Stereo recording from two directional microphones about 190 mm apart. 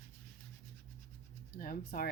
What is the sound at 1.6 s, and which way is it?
Speech, 50° left (ahead or behind).